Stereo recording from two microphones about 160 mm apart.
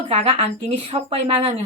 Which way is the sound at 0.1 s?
35° right (ahead or behind).